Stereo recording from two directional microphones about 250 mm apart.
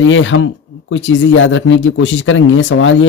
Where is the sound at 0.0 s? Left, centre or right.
Left.